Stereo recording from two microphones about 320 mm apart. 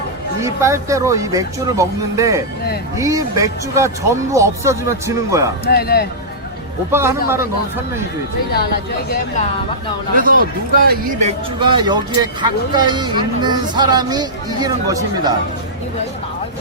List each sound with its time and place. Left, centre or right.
0.4 s speech: centre
5.6 s speech: left
6.9 s speech: centre
8.5 s speech: left
10.2 s speech: right
11.6 s speech: centre